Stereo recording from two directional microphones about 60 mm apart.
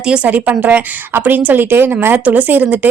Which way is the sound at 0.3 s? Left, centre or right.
Right.